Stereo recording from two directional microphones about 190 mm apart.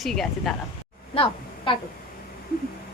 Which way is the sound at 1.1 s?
25° left (ahead or behind).